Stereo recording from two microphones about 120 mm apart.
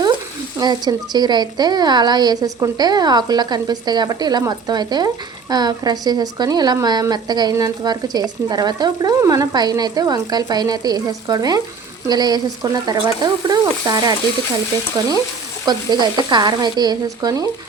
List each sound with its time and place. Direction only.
0.6 s a woman's voice: 35° right (ahead or behind)
15.6 s a woman's voice: 35° right (ahead or behind)